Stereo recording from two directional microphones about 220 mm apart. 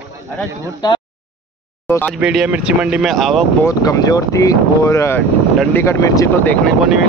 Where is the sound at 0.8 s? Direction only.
15° left (ahead or behind).